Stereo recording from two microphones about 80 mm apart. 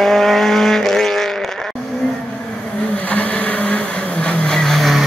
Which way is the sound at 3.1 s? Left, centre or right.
Centre.